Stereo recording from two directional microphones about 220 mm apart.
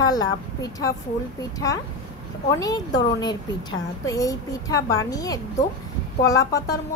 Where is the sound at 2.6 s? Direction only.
15° left (ahead or behind).